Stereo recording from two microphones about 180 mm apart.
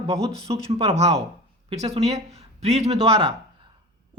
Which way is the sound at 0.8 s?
35° right (ahead or behind).